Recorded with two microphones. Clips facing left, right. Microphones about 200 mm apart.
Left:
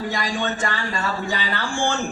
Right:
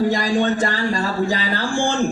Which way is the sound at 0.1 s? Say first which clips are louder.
Right 7 dB; 35° right (ahead or behind).